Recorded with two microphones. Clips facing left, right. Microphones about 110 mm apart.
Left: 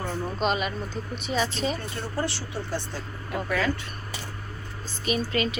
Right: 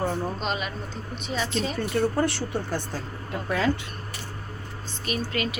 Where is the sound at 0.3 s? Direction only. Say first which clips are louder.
Left 4 dB; centre (ahead or behind).